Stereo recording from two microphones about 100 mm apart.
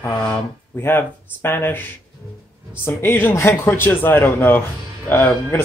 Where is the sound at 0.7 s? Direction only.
20° left (ahead or behind).